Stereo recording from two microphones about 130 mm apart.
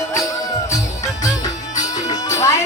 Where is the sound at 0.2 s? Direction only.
25° left (ahead or behind).